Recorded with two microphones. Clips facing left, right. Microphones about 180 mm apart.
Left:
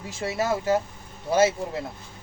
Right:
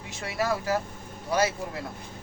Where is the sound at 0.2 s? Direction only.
25° left (ahead or behind).